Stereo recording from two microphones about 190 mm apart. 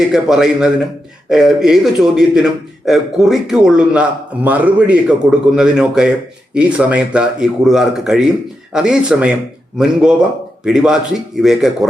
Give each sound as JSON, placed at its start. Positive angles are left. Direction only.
{"t": 0.1, "sound": "a man's voice", "side_deg": -5}